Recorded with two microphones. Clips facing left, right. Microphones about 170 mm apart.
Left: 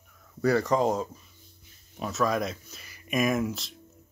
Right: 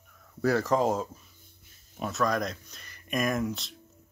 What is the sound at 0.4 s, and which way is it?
Speech, centre (ahead or behind).